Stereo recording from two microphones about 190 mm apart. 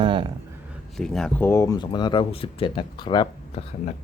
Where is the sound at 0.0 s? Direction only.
25° right (ahead or behind).